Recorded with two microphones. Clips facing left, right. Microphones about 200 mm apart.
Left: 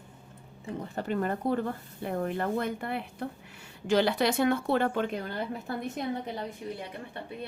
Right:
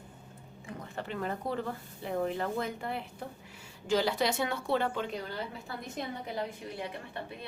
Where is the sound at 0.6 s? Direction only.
35° left (ahead or behind).